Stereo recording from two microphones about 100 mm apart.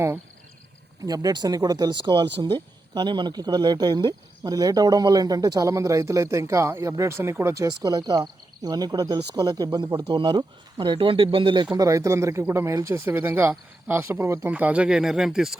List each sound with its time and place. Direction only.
1.0 s speech: 40° right (ahead or behind)
11.8 s speech: 30° right (ahead or behind)
13.1 s speech: 20° right (ahead or behind)
14.5 s speech: 15° right (ahead or behind)